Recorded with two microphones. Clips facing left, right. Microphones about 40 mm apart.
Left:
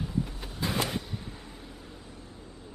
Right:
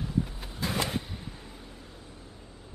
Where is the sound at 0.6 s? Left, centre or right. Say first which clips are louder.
Even; centre.